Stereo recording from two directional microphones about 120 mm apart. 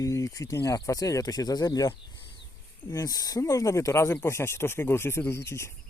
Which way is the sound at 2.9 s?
30° left (ahead or behind).